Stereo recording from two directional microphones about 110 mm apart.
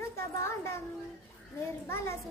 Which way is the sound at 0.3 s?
25° left (ahead or behind).